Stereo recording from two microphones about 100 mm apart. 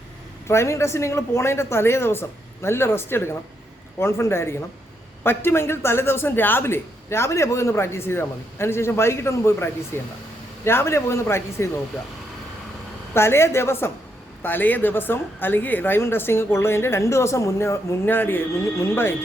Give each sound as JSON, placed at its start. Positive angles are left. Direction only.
{"t": 0.4, "sound": "a man's voice", "side_deg": 25}
{"t": 13.1, "sound": "a man's voice", "side_deg": 25}